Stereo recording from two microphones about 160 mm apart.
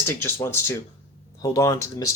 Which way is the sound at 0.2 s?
15° left (ahead or behind).